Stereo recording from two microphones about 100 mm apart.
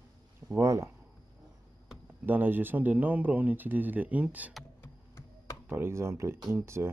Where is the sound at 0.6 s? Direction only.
30° right (ahead or behind).